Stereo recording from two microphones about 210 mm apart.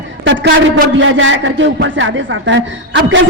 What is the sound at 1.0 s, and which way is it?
A man's voice, 65° right (ahead or behind).